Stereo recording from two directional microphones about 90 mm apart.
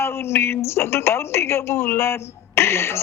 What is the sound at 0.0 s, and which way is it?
A woman's voice, 30° left (ahead or behind).